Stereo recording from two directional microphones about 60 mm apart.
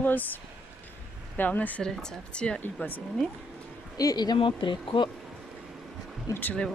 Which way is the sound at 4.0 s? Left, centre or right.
Left.